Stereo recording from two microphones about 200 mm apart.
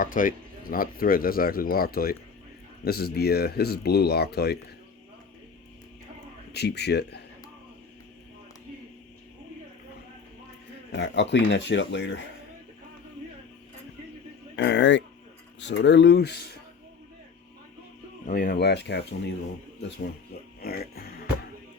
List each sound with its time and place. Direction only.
0.0 s speech: 40° left (ahead or behind)
6.5 s speech: 55° left (ahead or behind)
10.9 s speech: 60° left (ahead or behind)
14.5 s speech: 60° left (ahead or behind)
18.3 s speech: 45° left (ahead or behind)
20.6 s music: 50° left (ahead or behind)